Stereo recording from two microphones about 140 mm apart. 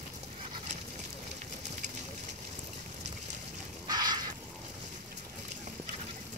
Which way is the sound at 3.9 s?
30° right (ahead or behind).